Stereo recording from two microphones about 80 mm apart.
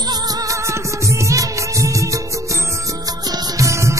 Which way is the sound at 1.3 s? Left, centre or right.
Right.